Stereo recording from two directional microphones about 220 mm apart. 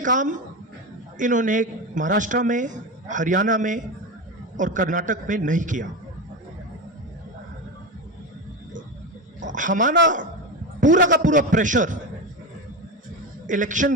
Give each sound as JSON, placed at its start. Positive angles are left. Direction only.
{"t": 0.0, "sound": "a man's voice", "side_deg": -35}
{"t": 9.4, "sound": "speech", "side_deg": -35}
{"t": 10.8, "sound": "a sound", "side_deg": -35}
{"t": 11.2, "sound": "a man's voice", "side_deg": -35}
{"t": 13.5, "sound": "a man's voice", "side_deg": -35}